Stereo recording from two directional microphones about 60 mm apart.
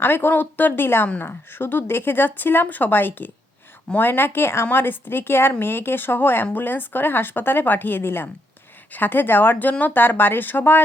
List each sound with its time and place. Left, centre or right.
0.0 s a woman's voice: left